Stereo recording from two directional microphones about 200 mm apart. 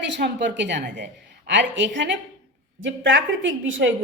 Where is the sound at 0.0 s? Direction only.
60° right (ahead or behind).